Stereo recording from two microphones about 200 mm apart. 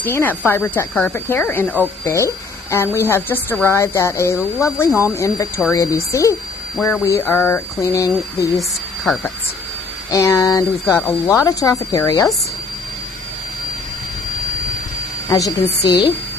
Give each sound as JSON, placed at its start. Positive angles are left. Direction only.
{"t": 0.0, "sound": "speech", "side_deg": 10}
{"t": 10.1, "sound": "speech", "side_deg": 15}
{"t": 15.3, "sound": "a woman's voice", "side_deg": 20}